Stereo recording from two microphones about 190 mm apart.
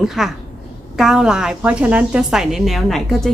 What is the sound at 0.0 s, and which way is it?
Speech, centre (ahead or behind).